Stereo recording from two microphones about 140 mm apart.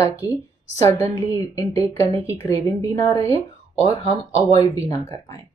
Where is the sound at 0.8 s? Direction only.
20° left (ahead or behind).